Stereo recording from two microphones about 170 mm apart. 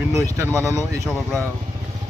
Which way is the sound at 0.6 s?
15° left (ahead or behind).